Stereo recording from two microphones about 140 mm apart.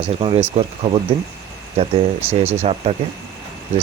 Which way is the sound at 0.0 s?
40° right (ahead or behind).